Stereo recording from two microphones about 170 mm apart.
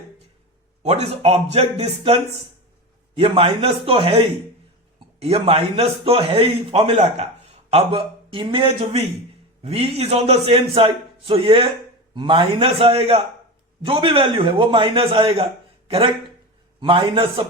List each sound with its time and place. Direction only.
0.8 s a man's voice: 40° right (ahead or behind)
3.2 s a man's voice: 35° right (ahead or behind)
16.8 s a man's voice: 30° right (ahead or behind)